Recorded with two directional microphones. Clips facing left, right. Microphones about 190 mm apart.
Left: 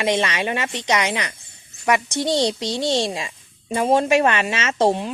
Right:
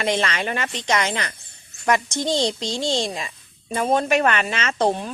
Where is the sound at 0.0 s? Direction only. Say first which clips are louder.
Left 2 dB; 20° left (ahead or behind).